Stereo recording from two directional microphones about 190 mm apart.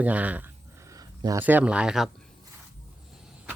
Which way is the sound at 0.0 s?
10° right (ahead or behind).